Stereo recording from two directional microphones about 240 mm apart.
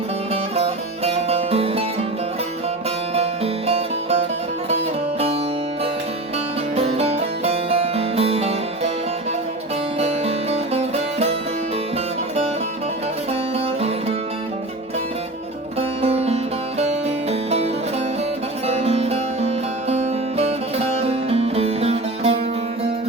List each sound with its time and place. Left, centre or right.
0.5 s music: right
3.2 s music: right
6.7 s music: right
10.0 s music: right
15.8 s music: right
18.7 s music: right